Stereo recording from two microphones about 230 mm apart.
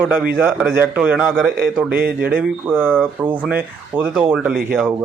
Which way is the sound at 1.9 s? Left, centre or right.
Right.